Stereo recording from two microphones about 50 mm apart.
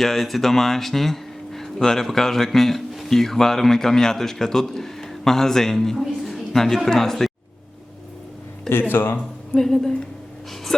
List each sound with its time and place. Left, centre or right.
0.0 s speech: centre
8.9 s speech: left
9.6 s a woman's voice: centre